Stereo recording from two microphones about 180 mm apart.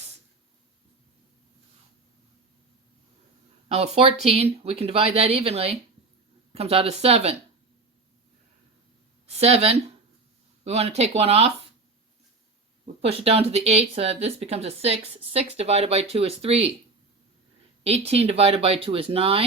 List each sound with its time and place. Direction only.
3.7 s speech: 35° right (ahead or behind)
9.2 s speech: 35° right (ahead or behind)
12.8 s speech: 35° right (ahead or behind)
17.8 s speech: 35° right (ahead or behind)